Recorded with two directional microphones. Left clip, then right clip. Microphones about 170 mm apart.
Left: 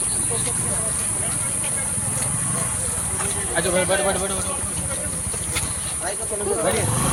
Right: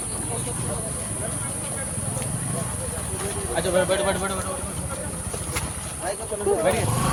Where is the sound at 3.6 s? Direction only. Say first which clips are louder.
Left 1 dB; 55° left (ahead or behind).